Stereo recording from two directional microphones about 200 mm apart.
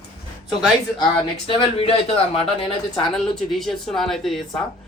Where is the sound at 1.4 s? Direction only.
25° left (ahead or behind).